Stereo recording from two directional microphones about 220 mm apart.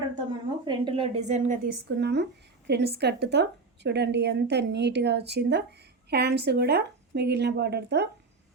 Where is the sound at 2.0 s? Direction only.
50° right (ahead or behind).